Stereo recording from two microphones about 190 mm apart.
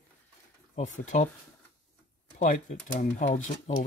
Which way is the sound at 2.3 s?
40° left (ahead or behind).